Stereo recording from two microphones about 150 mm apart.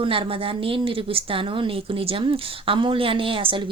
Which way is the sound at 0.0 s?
35° right (ahead or behind).